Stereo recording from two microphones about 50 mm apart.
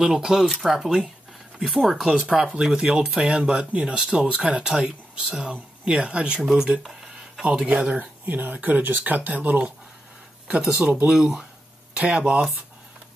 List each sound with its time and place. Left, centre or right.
0.0 s speech: centre
6.8 s a sound: centre
7.4 s speech: right
11.1 s speech: centre
11.9 s speech: right